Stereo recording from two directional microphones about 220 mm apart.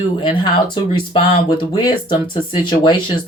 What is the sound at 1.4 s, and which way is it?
Speech, 20° left (ahead or behind).